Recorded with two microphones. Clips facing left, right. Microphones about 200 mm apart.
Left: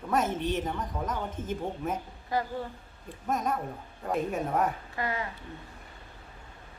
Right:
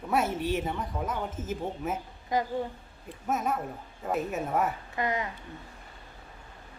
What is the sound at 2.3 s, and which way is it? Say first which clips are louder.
Speech: right 2 dB; 20° right (ahead or behind).